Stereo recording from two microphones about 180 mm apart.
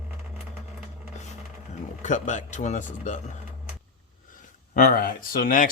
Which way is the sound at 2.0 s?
45° left (ahead or behind).